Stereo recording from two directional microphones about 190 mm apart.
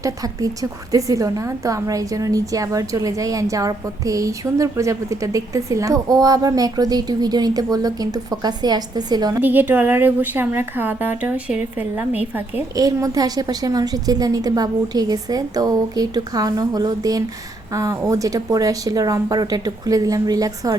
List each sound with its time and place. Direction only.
0.0 s a woman's voice: 20° right (ahead or behind)
9.4 s a woman's voice: 10° right (ahead or behind)